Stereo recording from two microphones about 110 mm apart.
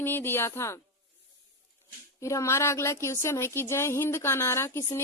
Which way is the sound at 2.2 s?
25° left (ahead or behind).